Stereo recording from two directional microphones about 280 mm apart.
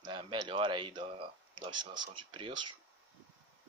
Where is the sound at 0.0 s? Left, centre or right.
Centre.